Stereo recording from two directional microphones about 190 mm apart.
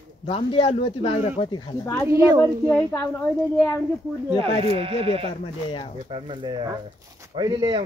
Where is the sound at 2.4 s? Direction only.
10° left (ahead or behind).